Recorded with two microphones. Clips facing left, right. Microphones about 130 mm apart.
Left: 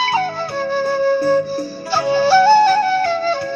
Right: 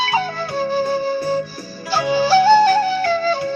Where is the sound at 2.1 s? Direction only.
10° right (ahead or behind).